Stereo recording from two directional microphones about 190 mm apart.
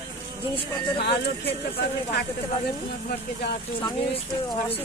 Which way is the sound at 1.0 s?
60° left (ahead or behind).